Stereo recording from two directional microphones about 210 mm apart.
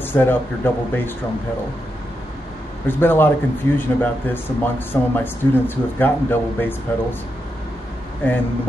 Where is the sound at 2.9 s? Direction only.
10° left (ahead or behind).